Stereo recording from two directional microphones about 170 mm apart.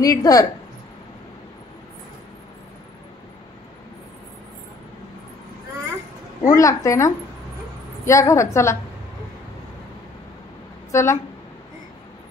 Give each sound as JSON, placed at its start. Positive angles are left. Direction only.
{"t": 0.0, "sound": "a woman's voice", "side_deg": 20}
{"t": 6.4, "sound": "a woman's voice", "side_deg": 20}
{"t": 10.9, "sound": "speech", "side_deg": 15}